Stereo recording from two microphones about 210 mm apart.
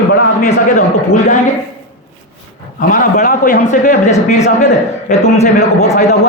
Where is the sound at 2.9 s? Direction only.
40° left (ahead or behind).